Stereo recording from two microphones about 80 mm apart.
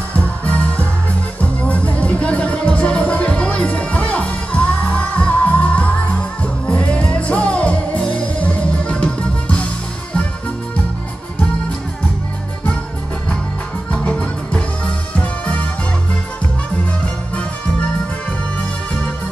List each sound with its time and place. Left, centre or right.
0.1 s music: centre
13.9 s music: centre